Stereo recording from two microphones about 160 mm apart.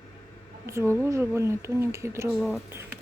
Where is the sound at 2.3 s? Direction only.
5° right (ahead or behind).